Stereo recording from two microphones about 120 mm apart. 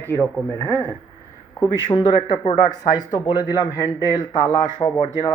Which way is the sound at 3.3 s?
30° left (ahead or behind).